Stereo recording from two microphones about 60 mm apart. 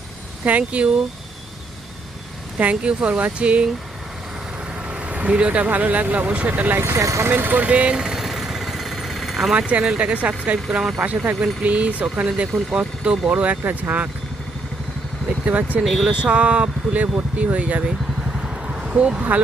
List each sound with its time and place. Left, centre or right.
0.4 s speech: right
2.6 s speech: right
4.9 s speech: right
6.9 s speech: right
7.3 s speech: right
7.9 s vehicle: centre
9.6 s speech: right
10.7 s speech: centre
11.6 s speech: right
15.4 s speech: right
15.8 s speech: centre
16.0 s speech: centre
17.8 s vehicle: centre